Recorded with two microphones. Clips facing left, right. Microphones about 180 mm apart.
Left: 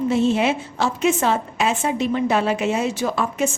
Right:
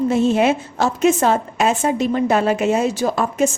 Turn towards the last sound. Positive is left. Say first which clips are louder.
# right 4 dB
turn(degrees=-40)  # may be behind; listen again after turning